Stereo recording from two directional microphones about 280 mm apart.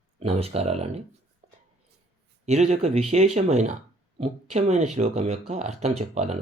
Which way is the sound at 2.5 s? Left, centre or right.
Right.